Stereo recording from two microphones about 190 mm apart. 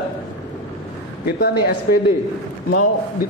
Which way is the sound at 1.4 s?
55° left (ahead or behind).